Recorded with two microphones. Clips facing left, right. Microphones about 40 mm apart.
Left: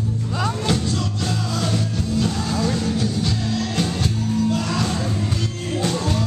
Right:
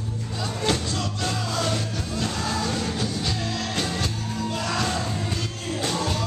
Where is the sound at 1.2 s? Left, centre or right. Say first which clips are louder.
Right 1 dB; centre.